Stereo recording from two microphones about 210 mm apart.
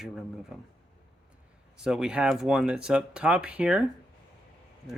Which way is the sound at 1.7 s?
5° right (ahead or behind).